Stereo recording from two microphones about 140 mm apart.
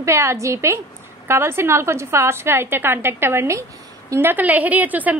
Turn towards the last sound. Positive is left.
turn(degrees=-10)  # may be behind; listen again after turning